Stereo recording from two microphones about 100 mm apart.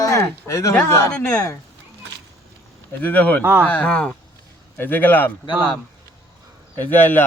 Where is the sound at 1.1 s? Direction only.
10° left (ahead or behind).